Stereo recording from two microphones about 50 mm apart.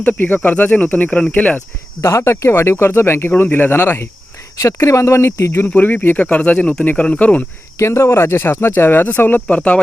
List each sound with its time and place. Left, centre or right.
0.2 s speech: left
2.0 s speech: left
4.6 s speech: left
5.6 s speech: left
6.3 s speech: left
7.8 s speech: left
9.6 s speech: left